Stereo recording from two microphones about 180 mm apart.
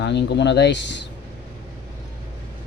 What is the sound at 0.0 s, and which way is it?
Speech, 75° left (ahead or behind).